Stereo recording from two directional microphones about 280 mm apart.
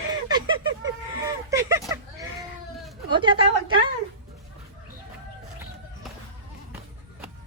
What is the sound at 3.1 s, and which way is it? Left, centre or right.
Speech, centre.